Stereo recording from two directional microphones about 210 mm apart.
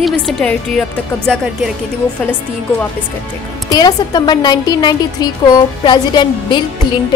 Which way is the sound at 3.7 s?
20° left (ahead or behind).